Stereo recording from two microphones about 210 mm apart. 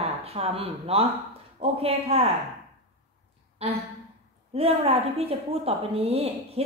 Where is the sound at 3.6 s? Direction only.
25° right (ahead or behind).